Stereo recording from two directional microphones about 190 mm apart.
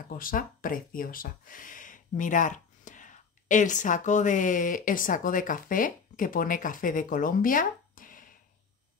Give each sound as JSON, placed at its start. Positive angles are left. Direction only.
{"t": 0.1, "sound": "speech", "side_deg": 45}